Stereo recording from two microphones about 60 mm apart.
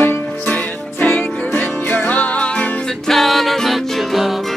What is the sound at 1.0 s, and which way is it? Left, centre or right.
Music, left.